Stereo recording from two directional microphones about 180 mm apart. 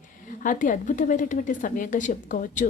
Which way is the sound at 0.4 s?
45° left (ahead or behind).